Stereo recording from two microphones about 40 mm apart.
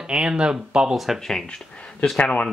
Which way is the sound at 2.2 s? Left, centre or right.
Left.